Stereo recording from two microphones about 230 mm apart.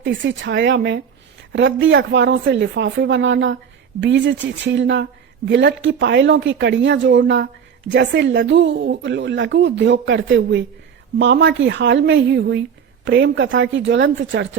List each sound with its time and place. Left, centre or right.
0.0 s speech: right